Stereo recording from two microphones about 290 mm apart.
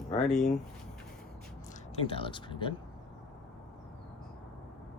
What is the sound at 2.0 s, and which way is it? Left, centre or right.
Speech, centre.